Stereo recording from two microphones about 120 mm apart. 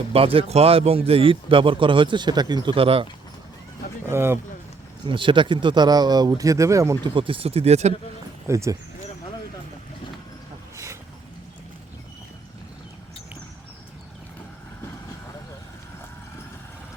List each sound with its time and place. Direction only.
0.1 s a man's voice: 50° right (ahead or behind); by 2.7 s 35° right (ahead or behind)
2.7 s a man's voice: 50° right (ahead or behind)
4.0 s speech: 20° right (ahead or behind)
5.0 s speech: 45° right (ahead or behind); by 7.0 s 25° right (ahead or behind)
7.0 s speech: 45° right (ahead or behind); by 7.9 s 65° right (ahead or behind)
8.4 s speech: 25° right (ahead or behind)